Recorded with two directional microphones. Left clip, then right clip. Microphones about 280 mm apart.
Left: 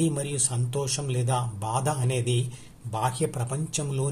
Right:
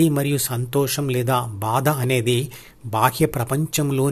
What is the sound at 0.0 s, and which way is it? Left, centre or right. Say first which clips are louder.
Speech: right 8 dB; right.